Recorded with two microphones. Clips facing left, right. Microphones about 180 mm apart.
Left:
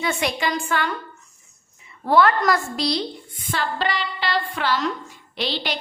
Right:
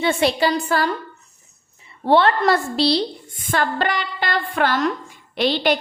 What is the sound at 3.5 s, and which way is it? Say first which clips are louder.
A woman's voice: right 4 dB; 50° right (ahead or behind).